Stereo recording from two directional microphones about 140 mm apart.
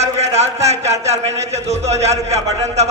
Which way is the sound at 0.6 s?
50° right (ahead or behind).